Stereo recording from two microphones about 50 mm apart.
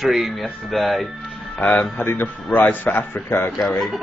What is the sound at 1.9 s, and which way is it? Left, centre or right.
Speech, left.